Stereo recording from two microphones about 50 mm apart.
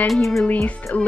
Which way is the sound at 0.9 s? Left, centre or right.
Left.